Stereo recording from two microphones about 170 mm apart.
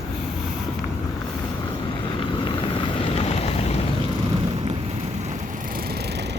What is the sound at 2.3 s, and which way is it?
Vehicle, 30° left (ahead or behind).